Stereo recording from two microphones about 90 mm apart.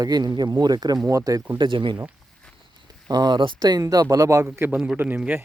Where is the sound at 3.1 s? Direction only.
50° right (ahead or behind).